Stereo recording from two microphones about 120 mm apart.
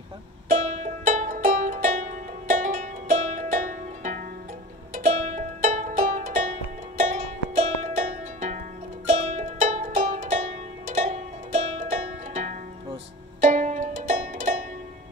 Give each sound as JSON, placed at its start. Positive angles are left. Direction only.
{"t": 0.5, "sound": "music", "side_deg": -80}